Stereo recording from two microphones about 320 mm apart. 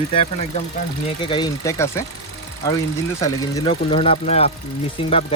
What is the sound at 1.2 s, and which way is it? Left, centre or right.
Speech, centre.